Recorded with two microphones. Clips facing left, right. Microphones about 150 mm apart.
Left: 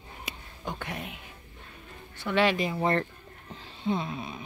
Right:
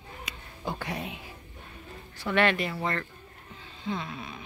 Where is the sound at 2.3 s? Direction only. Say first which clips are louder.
Left 1 dB; 5° left (ahead or behind).